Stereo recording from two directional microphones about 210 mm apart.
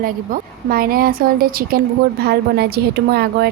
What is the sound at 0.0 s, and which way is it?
Speech, 45° right (ahead or behind).